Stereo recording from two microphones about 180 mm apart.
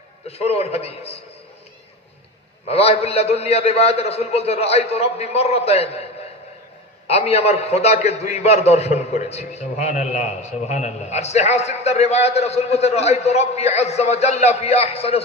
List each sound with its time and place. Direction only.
0.3 s a man's voice: 35° left (ahead or behind)
2.6 s a man's voice: 35° left (ahead or behind)
7.1 s a man's voice: 35° left (ahead or behind)